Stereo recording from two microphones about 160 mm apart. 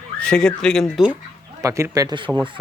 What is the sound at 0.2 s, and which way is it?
Speech, 5° left (ahead or behind).